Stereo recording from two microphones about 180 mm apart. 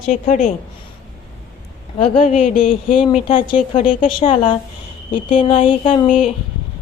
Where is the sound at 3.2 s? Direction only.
30° left (ahead or behind).